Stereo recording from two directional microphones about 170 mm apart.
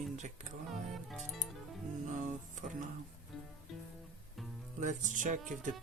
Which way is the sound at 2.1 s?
45° right (ahead or behind).